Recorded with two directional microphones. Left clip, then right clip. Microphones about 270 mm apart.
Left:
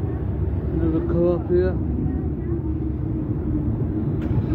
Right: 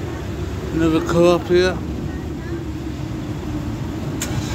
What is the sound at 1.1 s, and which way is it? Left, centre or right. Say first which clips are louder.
Speech: right 6 dB; right.